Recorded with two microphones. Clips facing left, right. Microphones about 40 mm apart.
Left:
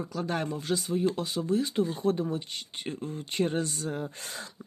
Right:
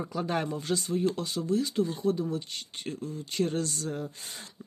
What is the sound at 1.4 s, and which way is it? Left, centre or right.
Speech, left.